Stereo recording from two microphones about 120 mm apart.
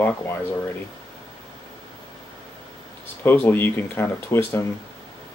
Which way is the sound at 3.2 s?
20° left (ahead or behind).